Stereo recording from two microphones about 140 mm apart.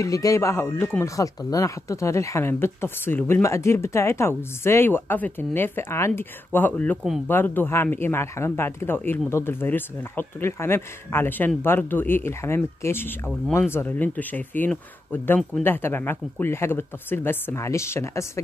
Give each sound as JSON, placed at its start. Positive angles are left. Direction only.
{"t": 0.0, "sound": "speech", "side_deg": 25}